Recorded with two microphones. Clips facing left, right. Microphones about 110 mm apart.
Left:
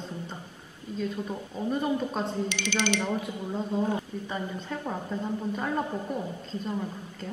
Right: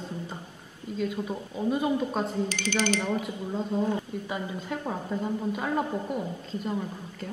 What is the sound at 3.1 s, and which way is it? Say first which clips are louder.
A woman's voice: right 1 dB; centre (ahead or behind).